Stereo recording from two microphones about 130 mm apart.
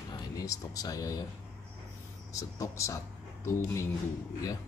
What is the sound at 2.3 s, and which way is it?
Speech, 25° left (ahead or behind).